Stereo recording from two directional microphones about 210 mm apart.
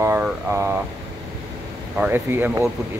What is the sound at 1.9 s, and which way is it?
Speech, 10° right (ahead or behind).